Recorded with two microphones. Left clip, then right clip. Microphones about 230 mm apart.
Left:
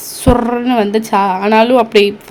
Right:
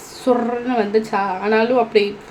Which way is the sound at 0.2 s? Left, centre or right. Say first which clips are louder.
Left 5 dB; left.